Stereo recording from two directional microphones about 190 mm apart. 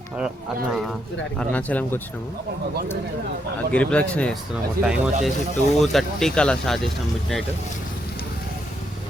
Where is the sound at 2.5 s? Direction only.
55° right (ahead or behind).